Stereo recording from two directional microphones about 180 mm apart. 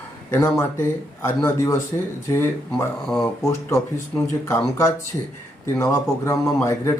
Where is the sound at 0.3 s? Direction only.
15° left (ahead or behind).